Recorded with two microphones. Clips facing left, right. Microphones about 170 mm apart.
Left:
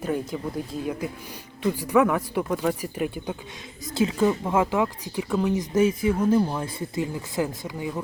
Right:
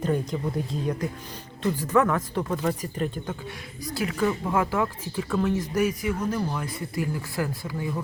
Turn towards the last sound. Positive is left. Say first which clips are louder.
# even
turn(degrees=15)  # may be behind; listen again after turning